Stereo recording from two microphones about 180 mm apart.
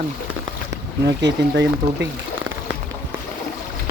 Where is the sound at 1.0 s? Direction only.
75° right (ahead or behind).